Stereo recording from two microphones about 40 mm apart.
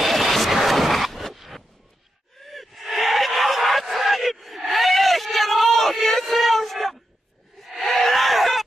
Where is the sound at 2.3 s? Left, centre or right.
Centre.